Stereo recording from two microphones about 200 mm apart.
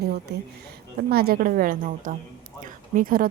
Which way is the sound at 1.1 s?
50° right (ahead or behind).